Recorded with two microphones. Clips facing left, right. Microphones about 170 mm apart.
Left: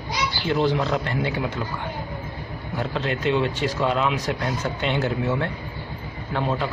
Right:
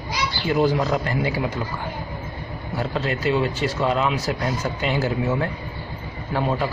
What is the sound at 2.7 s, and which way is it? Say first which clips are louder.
Speech: right 1 dB; centre (ahead or behind).